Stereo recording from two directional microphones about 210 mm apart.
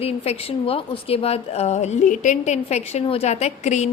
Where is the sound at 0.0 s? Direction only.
30° left (ahead or behind).